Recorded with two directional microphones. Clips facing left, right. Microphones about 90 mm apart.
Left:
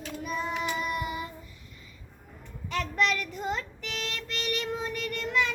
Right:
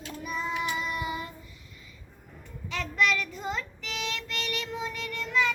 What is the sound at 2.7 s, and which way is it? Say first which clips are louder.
Child singing: even; 50° left (ahead or behind).